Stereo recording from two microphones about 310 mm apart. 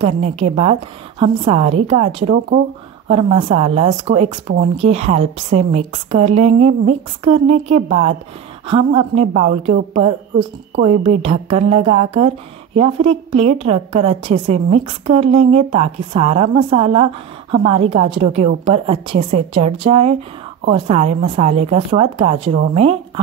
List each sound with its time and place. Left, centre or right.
0.0 s a woman's voice: centre